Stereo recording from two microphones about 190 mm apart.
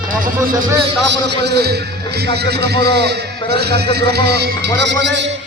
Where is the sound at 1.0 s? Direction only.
60° right (ahead or behind).